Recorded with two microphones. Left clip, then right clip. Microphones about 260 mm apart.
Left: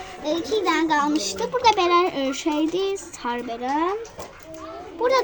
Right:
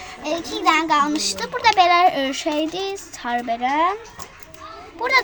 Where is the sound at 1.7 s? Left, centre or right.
Centre.